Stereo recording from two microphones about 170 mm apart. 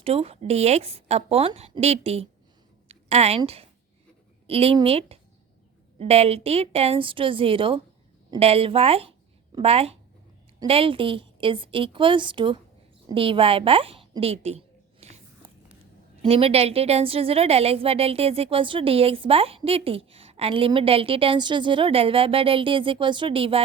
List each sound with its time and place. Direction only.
0.0 s a woman's voice: 35° right (ahead or behind)
15.0 s biting: 40° right (ahead or behind)
16.2 s a woman's voice: 35° right (ahead or behind)